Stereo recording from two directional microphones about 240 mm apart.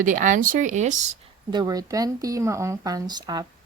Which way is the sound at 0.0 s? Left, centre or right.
Right.